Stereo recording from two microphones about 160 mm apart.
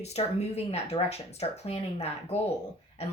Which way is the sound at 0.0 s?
40° left (ahead or behind).